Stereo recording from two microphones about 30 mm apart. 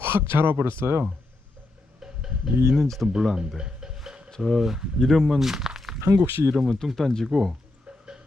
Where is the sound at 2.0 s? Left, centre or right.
Centre.